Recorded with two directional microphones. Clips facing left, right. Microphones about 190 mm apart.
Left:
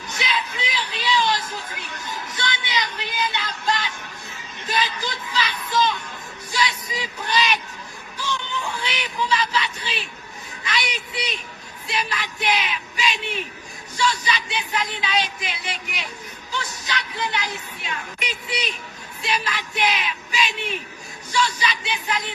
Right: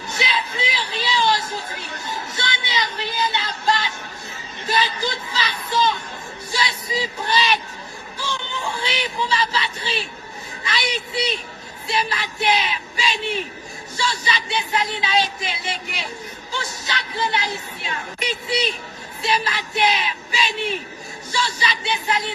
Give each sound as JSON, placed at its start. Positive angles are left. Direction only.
{"t": 0.1, "sound": "a sound", "side_deg": -30}
{"t": 6.5, "sound": "music", "side_deg": -35}
{"t": 10.6, "sound": "a woman's voice", "side_deg": -30}
{"t": 11.9, "sound": "music", "side_deg": -35}
{"t": 16.6, "sound": "speech", "side_deg": -35}
{"t": 19.2, "sound": "music", "side_deg": -35}